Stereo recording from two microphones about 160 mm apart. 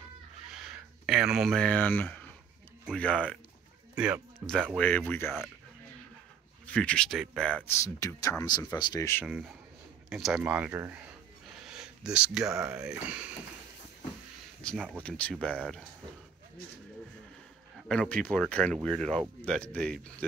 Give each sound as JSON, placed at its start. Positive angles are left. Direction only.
{"t": 0.6, "sound": "speech", "side_deg": -5}
{"t": 3.9, "sound": "speech", "side_deg": -5}
{"t": 4.7, "sound": "speech", "side_deg": 10}
{"t": 6.6, "sound": "speech", "side_deg": 5}
{"t": 7.7, "sound": "speech", "side_deg": 20}
{"t": 10.0, "sound": "speech", "side_deg": 0}
{"t": 11.6, "sound": "a sound", "side_deg": -5}
{"t": 12.7, "sound": "speech", "side_deg": -5}
{"t": 14.6, "sound": "speech", "side_deg": 5}
{"t": 17.8, "sound": "speech", "side_deg": 5}